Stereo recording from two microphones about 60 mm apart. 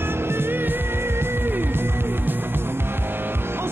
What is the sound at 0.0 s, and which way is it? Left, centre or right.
Music, right.